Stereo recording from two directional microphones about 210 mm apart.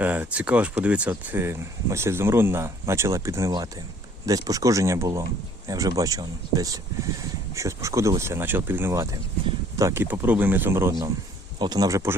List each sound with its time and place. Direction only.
0.0 s speech: 10° right (ahead or behind)